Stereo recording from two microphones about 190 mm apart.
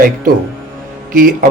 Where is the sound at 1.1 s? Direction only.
45° right (ahead or behind).